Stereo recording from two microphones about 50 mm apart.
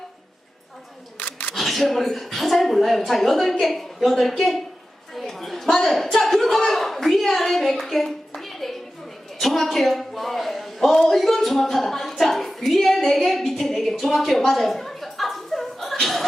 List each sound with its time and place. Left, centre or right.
1.2 s single-lens reflex camera: left
1.5 s a woman's voice: centre
5.1 s a sound: centre